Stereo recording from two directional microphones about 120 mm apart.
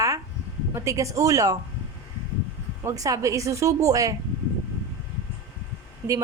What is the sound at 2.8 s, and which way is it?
Speech, 30° right (ahead or behind).